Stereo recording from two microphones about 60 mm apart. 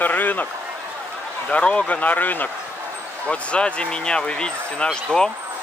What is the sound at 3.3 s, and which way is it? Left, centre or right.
Speech, centre.